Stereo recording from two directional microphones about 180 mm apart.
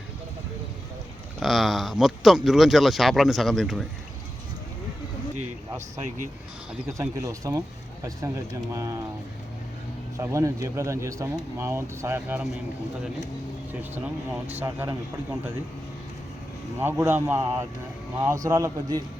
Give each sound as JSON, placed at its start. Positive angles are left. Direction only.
{"t": 1.4, "sound": "speech", "side_deg": 0}
{"t": 6.8, "sound": "speech", "side_deg": -15}
{"t": 8.7, "sound": "speech", "side_deg": -15}
{"t": 10.2, "sound": "speech", "side_deg": -15}
{"t": 13.9, "sound": "speech", "side_deg": -10}
{"t": 16.8, "sound": "speech", "side_deg": -15}